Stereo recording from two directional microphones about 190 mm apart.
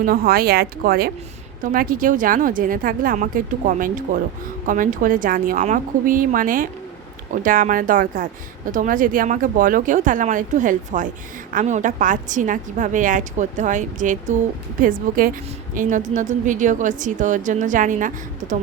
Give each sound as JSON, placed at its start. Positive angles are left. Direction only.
{"t": 0.0, "sound": "a woman's voice", "side_deg": -50}